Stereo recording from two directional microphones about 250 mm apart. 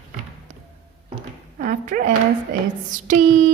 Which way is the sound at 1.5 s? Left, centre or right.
Right.